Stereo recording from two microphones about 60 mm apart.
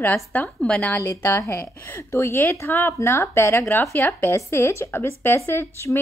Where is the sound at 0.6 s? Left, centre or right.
Centre.